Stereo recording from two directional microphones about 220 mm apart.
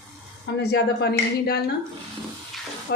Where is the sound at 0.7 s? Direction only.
50° left (ahead or behind).